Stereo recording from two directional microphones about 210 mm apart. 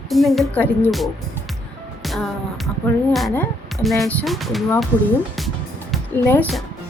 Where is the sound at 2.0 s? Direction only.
Centre (ahead or behind).